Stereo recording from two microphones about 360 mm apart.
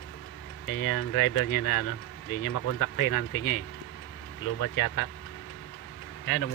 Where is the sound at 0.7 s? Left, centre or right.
Left.